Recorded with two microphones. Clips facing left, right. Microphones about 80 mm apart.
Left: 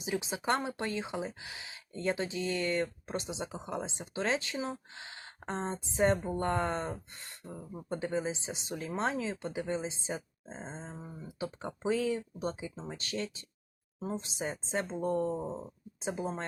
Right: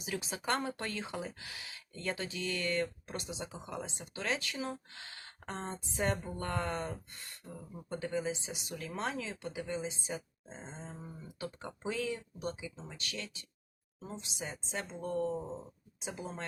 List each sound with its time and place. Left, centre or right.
0.0 s speech: left
10.9 s speech: left